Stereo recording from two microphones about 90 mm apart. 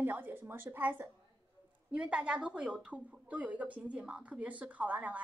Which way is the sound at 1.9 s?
10° right (ahead or behind).